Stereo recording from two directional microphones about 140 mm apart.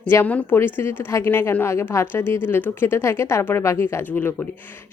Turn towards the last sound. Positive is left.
turn(degrees=15)  # may be behind; listen again after turning